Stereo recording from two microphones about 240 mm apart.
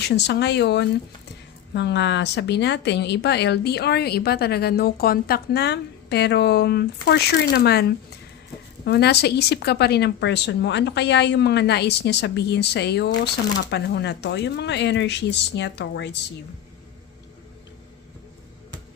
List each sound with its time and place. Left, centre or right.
0.1 s speech: left